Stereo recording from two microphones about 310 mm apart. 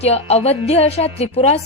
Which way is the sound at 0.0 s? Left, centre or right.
Centre.